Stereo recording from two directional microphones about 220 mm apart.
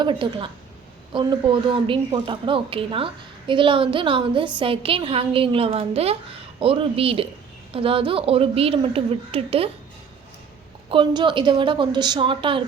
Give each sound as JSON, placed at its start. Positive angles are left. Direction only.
{"t": 0.0, "sound": "a woman's voice", "side_deg": -20}
{"t": 10.8, "sound": "a woman's voice", "side_deg": -20}